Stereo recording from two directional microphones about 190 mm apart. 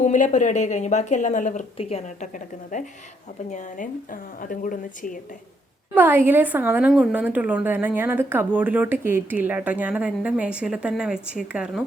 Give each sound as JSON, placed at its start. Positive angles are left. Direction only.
{"t": 0.0, "sound": "a woman's voice", "side_deg": 40}
{"t": 5.9, "sound": "a woman's voice", "side_deg": -10}